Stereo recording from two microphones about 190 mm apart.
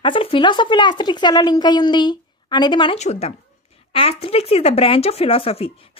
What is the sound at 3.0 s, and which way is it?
A woman's voice, 35° left (ahead or behind).